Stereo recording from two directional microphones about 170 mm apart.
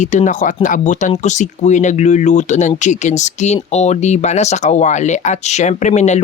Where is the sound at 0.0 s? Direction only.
45° left (ahead or behind).